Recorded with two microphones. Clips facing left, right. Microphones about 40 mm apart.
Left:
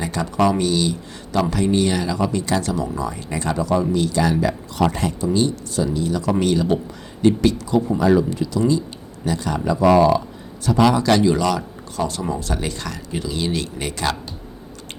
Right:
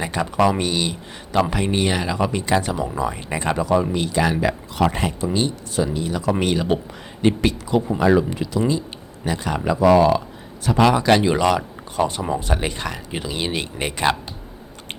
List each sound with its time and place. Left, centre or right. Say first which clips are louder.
0.0 s speech: even; right